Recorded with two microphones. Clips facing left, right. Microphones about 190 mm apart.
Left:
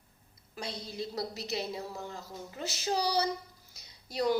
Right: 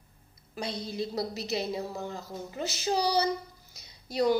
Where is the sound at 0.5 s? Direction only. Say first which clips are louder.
Right 5 dB; 15° right (ahead or behind).